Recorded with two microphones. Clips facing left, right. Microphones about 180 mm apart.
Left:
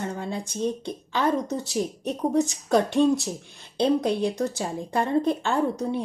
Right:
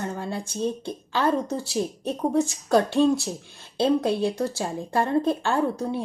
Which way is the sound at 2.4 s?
20° left (ahead or behind).